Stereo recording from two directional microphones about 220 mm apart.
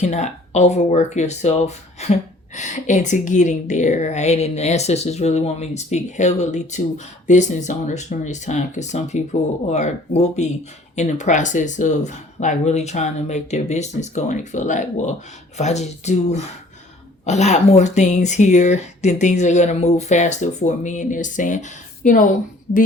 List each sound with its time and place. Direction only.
0.0 s a woman's voice: 30° left (ahead or behind)